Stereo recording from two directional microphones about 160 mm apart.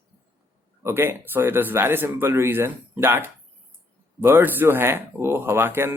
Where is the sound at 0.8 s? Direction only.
15° right (ahead or behind).